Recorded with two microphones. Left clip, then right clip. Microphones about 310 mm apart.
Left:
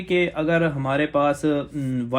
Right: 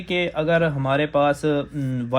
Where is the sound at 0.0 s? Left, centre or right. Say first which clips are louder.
Left 1 dB; right.